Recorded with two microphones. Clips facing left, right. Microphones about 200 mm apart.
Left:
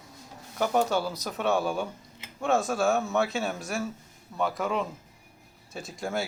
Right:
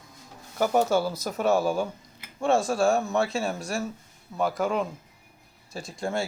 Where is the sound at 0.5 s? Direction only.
5° right (ahead or behind).